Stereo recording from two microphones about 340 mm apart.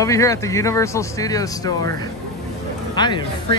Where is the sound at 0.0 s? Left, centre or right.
Centre.